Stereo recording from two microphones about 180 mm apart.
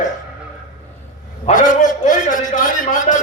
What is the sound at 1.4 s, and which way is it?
A man's voice, 45° left (ahead or behind).